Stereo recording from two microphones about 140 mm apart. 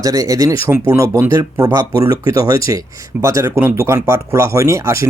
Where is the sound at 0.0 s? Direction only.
25° right (ahead or behind).